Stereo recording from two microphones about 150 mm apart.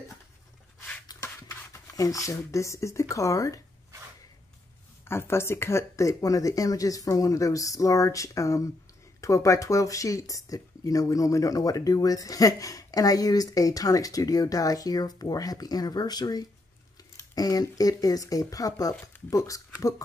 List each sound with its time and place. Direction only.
1.0 s speech: 20° left (ahead or behind)
5.0 s speech: 15° left (ahead or behind)